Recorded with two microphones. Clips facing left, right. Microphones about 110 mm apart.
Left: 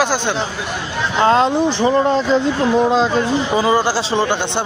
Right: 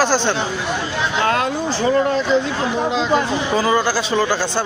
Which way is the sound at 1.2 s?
25° left (ahead or behind).